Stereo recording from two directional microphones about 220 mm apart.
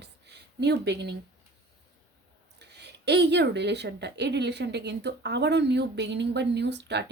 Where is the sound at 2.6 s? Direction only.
50° right (ahead or behind).